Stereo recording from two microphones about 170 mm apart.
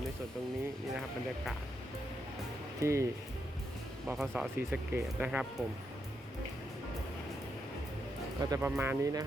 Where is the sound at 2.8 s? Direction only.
15° right (ahead or behind).